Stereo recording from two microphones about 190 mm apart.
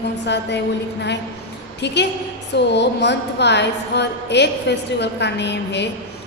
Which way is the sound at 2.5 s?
65° left (ahead or behind).